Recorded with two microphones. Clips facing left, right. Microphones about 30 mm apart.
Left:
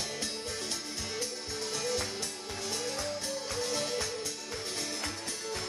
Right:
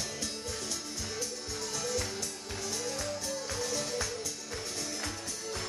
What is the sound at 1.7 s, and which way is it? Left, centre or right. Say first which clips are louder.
Music: left 1 dB; left.